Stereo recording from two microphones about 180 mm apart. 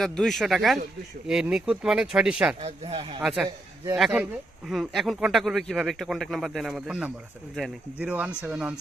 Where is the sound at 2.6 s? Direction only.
35° right (ahead or behind).